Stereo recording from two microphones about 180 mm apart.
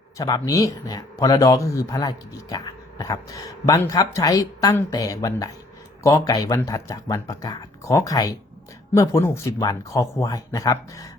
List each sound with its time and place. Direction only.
0.2 s speech: 20° left (ahead or behind)